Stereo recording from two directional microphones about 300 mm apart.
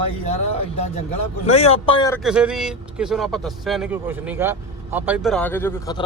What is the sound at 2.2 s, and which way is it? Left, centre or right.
Speech, centre.